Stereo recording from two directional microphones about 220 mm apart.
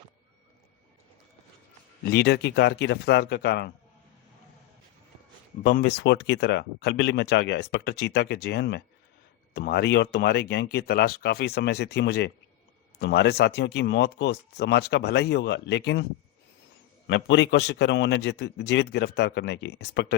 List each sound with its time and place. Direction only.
2.0 s speech: 50° left (ahead or behind)
5.6 s speech: 45° left (ahead or behind)
17.1 s speech: 55° left (ahead or behind)